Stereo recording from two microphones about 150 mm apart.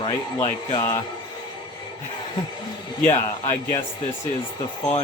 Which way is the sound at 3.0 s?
50° left (ahead or behind).